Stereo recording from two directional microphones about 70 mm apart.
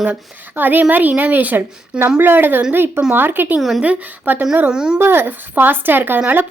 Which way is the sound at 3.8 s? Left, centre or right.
Centre.